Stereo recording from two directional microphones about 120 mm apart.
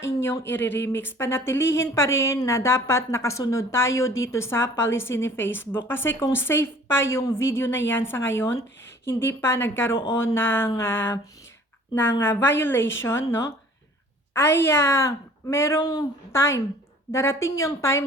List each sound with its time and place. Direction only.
0.2 s speech: 20° left (ahead or behind)
12.2 s speech: 20° left (ahead or behind)
15.8 s speech: 35° left (ahead or behind)
16.3 s speech: 25° left (ahead or behind)